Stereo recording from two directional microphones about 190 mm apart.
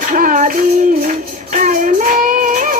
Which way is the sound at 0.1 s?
45° right (ahead or behind).